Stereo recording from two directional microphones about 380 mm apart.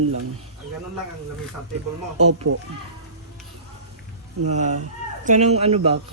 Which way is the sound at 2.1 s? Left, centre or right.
Right.